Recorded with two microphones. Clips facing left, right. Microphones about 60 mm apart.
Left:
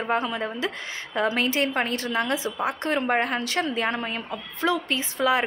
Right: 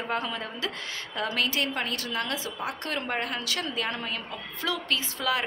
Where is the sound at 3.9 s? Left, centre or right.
Centre.